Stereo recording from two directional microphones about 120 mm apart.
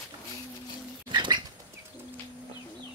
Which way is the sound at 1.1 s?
40° right (ahead or behind).